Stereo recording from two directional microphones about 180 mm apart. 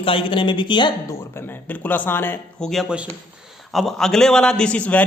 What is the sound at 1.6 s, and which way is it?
A man's voice, 10° left (ahead or behind).